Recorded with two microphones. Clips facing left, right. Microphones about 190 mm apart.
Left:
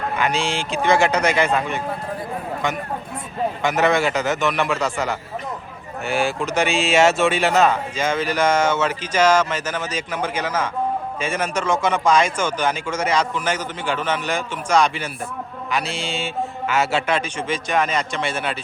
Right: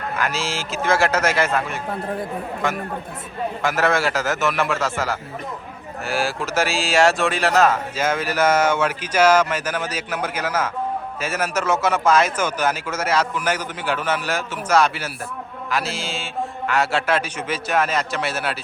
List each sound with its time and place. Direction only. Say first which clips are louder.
0.2 s speech: left 3 dB; centre (ahead or behind)